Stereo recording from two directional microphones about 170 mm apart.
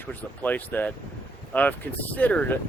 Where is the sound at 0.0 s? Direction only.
10° left (ahead or behind).